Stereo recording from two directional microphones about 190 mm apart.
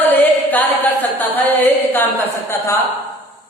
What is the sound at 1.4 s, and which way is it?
Speech, 10° left (ahead or behind).